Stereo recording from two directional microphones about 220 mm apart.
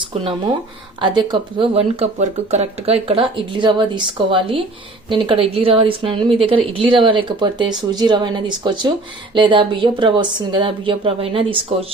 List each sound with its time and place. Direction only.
0.0 s speech: 25° right (ahead or behind)